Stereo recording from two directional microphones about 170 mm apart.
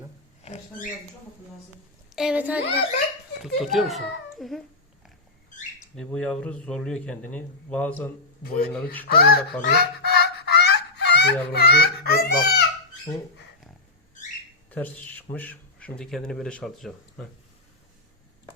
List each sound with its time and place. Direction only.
0.4 s a sound: 40° left (ahead or behind)
2.1 s a child's voice: 5° right (ahead or behind)
6.0 s a man's voice: 5° left (ahead or behind)
8.4 s speech: 65° left (ahead or behind)
14.7 s a man's voice: 10° left (ahead or behind)